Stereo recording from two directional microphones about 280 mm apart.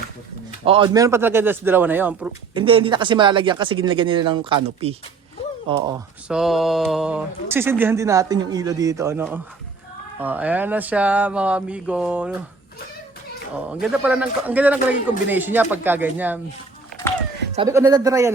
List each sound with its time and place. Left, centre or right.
0.6 s speech: centre
2.6 s speech: centre
6.2 s speech: centre
13.8 s speech: centre
17.7 s speech: centre